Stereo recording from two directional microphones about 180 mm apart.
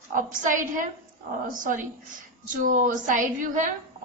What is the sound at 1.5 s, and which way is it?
A woman's voice, 45° right (ahead or behind).